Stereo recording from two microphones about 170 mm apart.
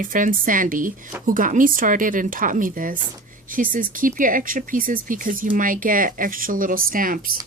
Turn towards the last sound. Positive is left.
turn(degrees=-55)  # may be behind; listen again after turning